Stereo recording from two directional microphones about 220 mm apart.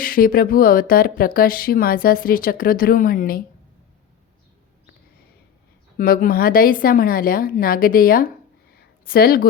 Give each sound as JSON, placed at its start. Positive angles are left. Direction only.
{"t": 0.0, "sound": "speech", "side_deg": 40}
{"t": 6.0, "sound": "speech", "side_deg": 40}